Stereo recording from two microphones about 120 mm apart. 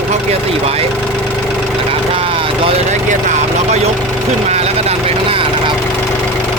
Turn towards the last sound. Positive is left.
turn(degrees=-55)  # may be behind; listen again after turning